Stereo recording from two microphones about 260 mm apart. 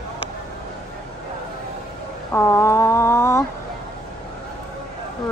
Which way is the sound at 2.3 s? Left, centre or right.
Centre.